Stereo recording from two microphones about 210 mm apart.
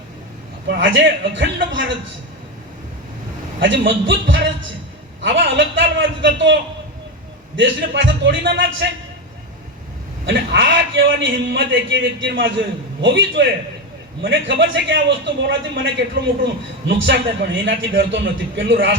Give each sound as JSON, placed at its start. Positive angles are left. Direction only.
{"t": 0.7, "sound": "a man's voice", "side_deg": -60}
{"t": 3.6, "sound": "a man's voice", "side_deg": -60}
{"t": 10.2, "sound": "a man's voice", "side_deg": -60}